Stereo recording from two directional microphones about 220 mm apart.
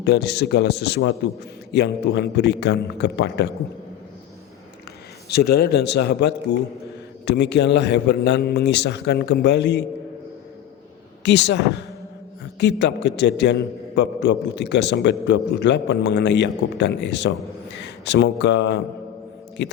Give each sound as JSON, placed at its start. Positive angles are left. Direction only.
{"t": 0.0, "sound": "a man's voice", "side_deg": 50}
{"t": 5.3, "sound": "a man's voice", "side_deg": 45}
{"t": 11.2, "sound": "a man's voice", "side_deg": 50}